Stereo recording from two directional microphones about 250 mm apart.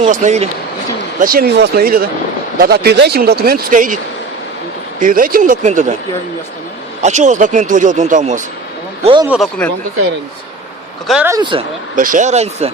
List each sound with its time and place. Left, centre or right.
0.0 s speech: right
4.9 s speech: right
7.0 s speech: right
9.2 s speech: centre
11.1 s speech: centre
11.3 s speech: centre
11.9 s speech: right